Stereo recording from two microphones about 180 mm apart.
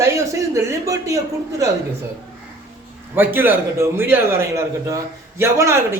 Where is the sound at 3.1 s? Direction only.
10° right (ahead or behind).